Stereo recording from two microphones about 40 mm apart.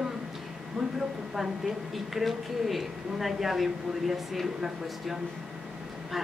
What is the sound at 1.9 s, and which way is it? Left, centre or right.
A man's voice, centre.